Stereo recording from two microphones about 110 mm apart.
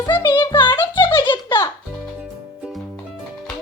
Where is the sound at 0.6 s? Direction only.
45° left (ahead or behind).